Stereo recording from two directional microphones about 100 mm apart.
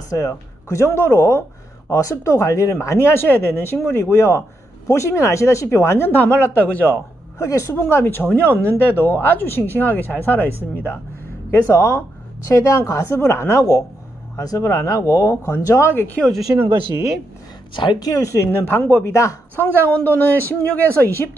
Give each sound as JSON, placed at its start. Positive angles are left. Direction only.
{"t": 0.1, "sound": "speech", "side_deg": 30}
{"t": 16.2, "sound": "speech", "side_deg": 5}
{"t": 17.7, "sound": "speech", "side_deg": 50}